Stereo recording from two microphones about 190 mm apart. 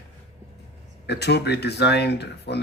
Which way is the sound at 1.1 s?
60° left (ahead or behind).